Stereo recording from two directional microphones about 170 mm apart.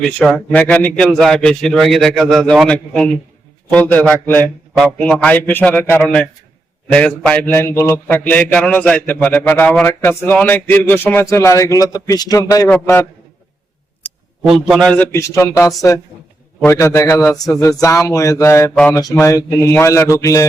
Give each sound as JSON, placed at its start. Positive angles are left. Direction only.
{"t": 0.0, "sound": "a man's voice", "side_deg": 5}
{"t": 14.5, "sound": "a man's voice", "side_deg": 0}